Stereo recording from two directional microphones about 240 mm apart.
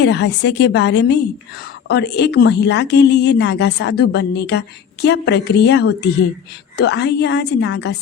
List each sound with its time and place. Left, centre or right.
0.0 s speech: left